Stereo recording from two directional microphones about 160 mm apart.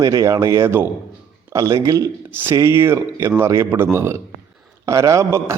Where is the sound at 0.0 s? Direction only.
20° right (ahead or behind).